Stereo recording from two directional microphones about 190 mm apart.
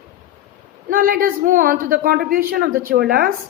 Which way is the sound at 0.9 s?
45° right (ahead or behind).